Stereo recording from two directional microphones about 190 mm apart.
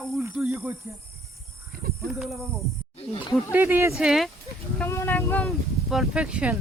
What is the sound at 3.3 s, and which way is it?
Speech, 10° right (ahead or behind).